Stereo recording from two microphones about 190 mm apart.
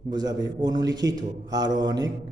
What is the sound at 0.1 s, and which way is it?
Speech, 20° right (ahead or behind).